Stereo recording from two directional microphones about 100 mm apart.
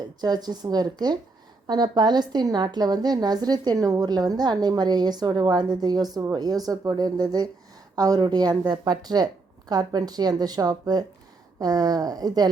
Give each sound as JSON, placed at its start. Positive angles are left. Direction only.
{"t": 0.2, "sound": "a woman's voice", "side_deg": -45}